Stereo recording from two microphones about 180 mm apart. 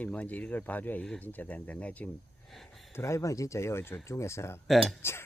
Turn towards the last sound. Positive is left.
turn(degrees=15)  # may be behind; listen again after turning